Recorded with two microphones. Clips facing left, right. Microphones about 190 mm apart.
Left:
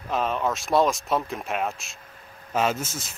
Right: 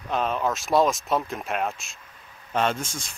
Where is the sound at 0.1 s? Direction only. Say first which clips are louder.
Even; centre (ahead or behind).